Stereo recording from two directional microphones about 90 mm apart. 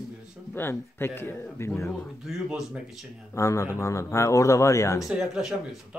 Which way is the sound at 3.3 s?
35° left (ahead or behind).